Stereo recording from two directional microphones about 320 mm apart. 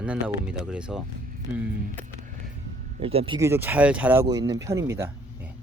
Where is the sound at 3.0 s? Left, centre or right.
Centre.